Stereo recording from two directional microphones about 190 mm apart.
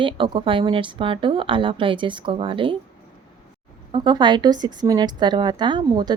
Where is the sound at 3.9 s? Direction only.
25° right (ahead or behind).